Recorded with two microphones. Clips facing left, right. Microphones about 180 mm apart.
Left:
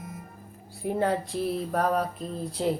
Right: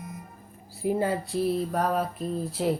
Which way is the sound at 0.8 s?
5° right (ahead or behind).